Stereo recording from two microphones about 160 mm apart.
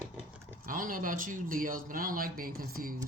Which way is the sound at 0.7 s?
60° right (ahead or behind).